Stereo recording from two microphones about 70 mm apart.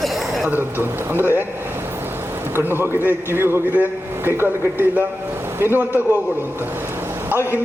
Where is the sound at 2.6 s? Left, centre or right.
Right.